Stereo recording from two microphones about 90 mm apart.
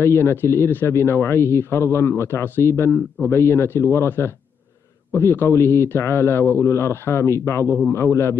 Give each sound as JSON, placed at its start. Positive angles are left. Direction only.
{"t": 0.0, "sound": "speech", "side_deg": 30}